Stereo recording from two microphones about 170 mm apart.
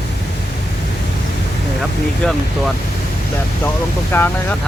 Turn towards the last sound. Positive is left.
turn(degrees=10)  # may be behind; listen again after turning